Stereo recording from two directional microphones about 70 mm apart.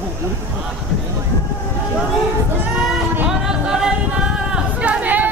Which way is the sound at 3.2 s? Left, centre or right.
Centre.